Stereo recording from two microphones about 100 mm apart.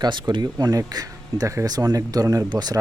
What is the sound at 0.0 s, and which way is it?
Speech, 50° right (ahead or behind).